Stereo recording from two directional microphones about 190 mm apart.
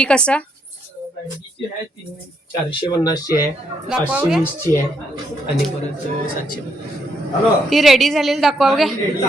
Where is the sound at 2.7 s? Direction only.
20° left (ahead or behind).